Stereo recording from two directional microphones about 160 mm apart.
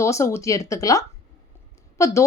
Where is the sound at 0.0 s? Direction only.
20° left (ahead or behind).